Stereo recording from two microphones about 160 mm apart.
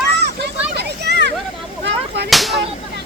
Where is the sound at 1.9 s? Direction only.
90° right.